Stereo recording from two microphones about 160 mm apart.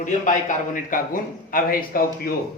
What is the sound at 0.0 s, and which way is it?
A man's voice, 55° left (ahead or behind).